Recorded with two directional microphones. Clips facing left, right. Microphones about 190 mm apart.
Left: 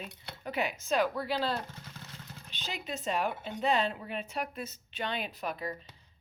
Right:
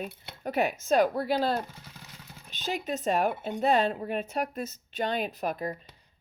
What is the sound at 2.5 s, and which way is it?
Speech, 45° right (ahead or behind).